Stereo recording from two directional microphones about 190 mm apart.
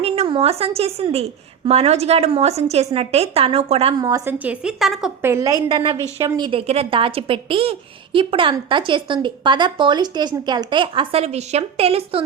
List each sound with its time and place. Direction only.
0.0 s a woman's voice: 30° right (ahead or behind)
4.0 s a woman's voice: 20° right (ahead or behind)
4.4 s a woman's voice: 5° right (ahead or behind)
5.3 s a woman's voice: 20° right (ahead or behind)